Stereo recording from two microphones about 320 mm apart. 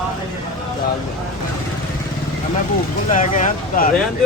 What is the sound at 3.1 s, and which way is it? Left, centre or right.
Speech, left.